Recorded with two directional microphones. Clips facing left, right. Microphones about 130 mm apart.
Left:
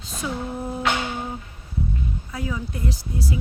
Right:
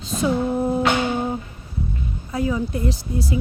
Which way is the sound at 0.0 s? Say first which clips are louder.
Right 9 dB; 25° right (ahead or behind).